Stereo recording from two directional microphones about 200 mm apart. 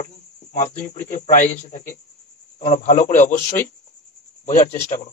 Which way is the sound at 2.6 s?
35° left (ahead or behind).